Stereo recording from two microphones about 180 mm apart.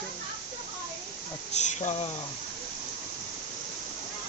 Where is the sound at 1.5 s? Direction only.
40° left (ahead or behind).